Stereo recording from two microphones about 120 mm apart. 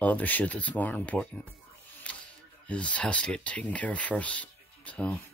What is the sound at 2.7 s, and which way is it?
Speech, 10° left (ahead or behind).